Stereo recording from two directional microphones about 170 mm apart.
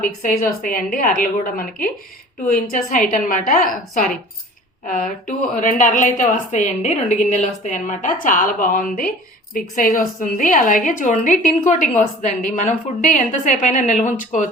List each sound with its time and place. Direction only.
0.0 s a woman's voice: 55° left (ahead or behind)